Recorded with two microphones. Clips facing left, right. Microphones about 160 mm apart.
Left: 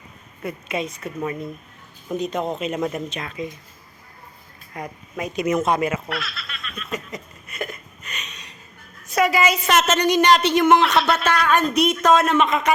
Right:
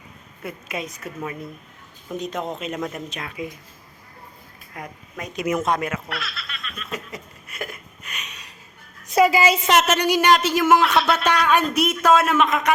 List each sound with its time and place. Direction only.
0.4 s speech: centre (ahead or behind)
4.7 s speech: 5° left (ahead or behind)
5.5 s a sound: centre (ahead or behind)
9.0 s a woman's voice: 25° right (ahead or behind)
9.7 s speech: 10° right (ahead or behind)